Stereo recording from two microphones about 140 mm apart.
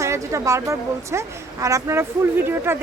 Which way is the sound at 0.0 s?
20° right (ahead or behind).